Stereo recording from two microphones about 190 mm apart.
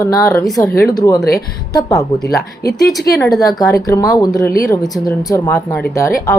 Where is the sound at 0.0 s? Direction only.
15° left (ahead or behind).